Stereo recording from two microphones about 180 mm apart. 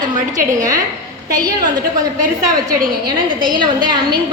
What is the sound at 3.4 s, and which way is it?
Speech, 25° right (ahead or behind).